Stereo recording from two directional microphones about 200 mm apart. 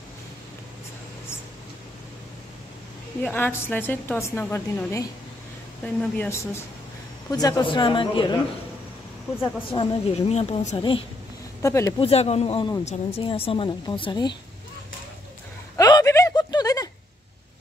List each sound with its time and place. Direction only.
3.2 s a woman's voice: 10° left (ahead or behind); by 8.4 s 25° left (ahead or behind)
9.7 s a woman's voice: 30° left (ahead or behind)
11.6 s a woman's voice: 15° left (ahead or behind)
12.0 s a woman's voice: 30° left (ahead or behind)
15.8 s a sound: 15° left (ahead or behind)